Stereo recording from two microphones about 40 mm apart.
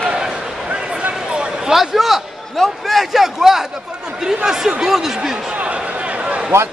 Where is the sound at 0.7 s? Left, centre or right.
Right.